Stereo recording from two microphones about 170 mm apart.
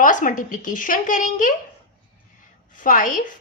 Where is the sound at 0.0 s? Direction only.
50° left (ahead or behind).